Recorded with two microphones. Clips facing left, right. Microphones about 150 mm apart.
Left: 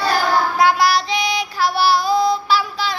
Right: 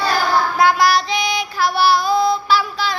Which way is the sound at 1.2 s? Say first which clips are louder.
Even; 35° left (ahead or behind).